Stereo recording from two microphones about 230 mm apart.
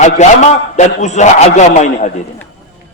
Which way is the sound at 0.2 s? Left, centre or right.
Left.